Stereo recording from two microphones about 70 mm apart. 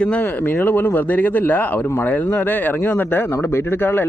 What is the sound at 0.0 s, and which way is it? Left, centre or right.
Speech, centre.